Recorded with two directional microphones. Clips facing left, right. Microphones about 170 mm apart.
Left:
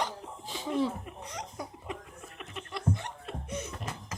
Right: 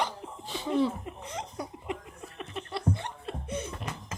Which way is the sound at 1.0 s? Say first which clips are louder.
Right 3 dB; 25° right (ahead or behind).